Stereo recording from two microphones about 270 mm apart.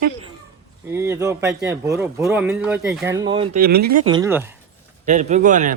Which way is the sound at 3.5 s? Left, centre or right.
Right.